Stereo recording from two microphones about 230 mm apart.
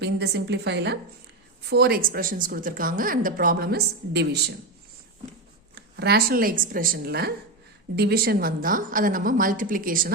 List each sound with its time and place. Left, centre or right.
0.0 s a woman's voice: right
5.7 s speech: right